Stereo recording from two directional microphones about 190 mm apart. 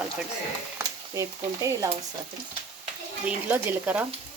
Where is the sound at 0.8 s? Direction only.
15° right (ahead or behind).